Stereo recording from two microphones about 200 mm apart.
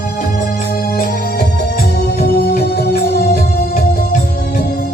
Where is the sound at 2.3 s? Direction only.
50° left (ahead or behind).